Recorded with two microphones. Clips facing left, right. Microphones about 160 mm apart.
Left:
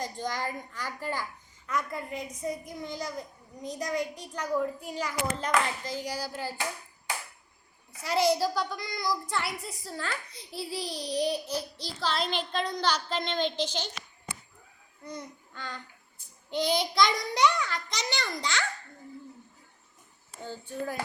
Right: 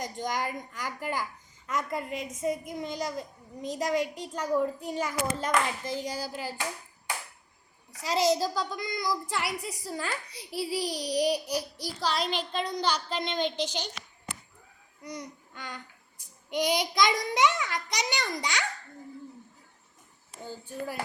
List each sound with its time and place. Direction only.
0.0 s a child's voice: 20° right (ahead or behind)
8.0 s a child's voice: 90° right
8.4 s a child's voice: 20° right (ahead or behind)
15.0 s a child's voice: 15° right (ahead or behind)
20.4 s a child's voice: 10° right (ahead or behind)